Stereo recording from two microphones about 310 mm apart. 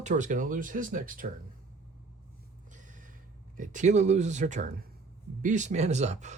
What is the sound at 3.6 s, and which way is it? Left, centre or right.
Speech, right.